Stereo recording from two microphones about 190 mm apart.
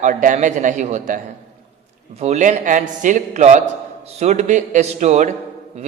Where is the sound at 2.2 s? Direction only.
35° right (ahead or behind).